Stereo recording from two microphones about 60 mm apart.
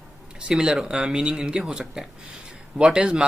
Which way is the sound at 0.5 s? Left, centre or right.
Centre.